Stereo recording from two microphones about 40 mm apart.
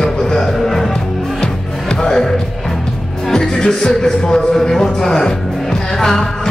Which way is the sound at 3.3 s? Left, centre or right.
Centre.